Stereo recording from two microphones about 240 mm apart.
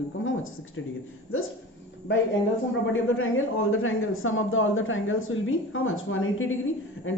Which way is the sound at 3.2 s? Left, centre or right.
Left.